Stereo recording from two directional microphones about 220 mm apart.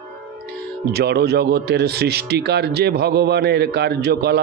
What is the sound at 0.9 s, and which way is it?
A man's voice, 45° right (ahead or behind).